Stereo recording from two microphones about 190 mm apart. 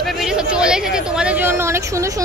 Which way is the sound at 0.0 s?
Centre (ahead or behind).